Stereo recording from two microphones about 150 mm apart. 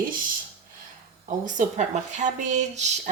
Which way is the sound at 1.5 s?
55° right (ahead or behind).